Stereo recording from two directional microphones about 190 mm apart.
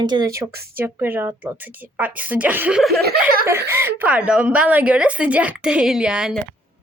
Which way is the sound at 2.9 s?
55° right (ahead or behind).